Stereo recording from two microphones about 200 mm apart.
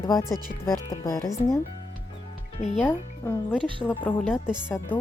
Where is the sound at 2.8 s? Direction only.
10° left (ahead or behind).